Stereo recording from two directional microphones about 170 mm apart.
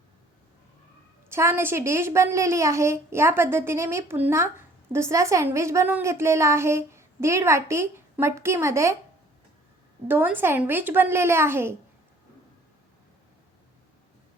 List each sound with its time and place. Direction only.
1.3 s a woman's voice: 15° right (ahead or behind)
10.1 s a woman's voice: 10° right (ahead or behind)